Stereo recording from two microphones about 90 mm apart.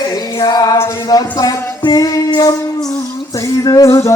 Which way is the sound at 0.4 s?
50° left (ahead or behind).